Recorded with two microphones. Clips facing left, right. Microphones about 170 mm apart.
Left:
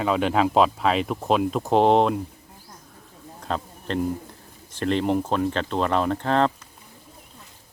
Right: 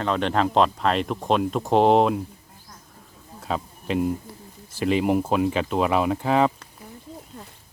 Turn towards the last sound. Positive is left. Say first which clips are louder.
# right 1 dB
turn(degrees=-5)  # may be behind; listen again after turning